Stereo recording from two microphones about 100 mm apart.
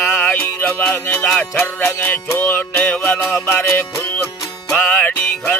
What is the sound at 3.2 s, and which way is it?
Music, 25° left (ahead or behind).